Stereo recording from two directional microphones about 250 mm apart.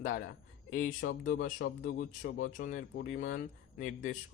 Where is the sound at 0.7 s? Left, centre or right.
Left.